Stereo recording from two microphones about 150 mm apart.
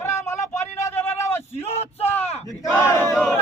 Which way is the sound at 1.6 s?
45° left (ahead or behind).